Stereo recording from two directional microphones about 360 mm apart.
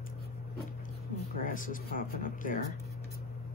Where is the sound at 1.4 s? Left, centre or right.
Left.